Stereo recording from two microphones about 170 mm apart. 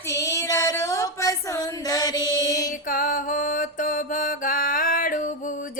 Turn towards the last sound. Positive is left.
turn(degrees=55)  # may be behind; listen again after turning